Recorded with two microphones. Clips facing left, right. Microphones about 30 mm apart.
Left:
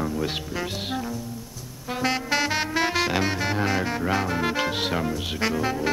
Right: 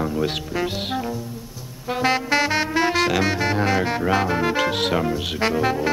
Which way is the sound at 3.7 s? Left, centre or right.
Right.